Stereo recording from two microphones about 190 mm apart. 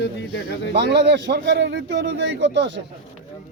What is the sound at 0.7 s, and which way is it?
A man's voice, 65° right (ahead or behind).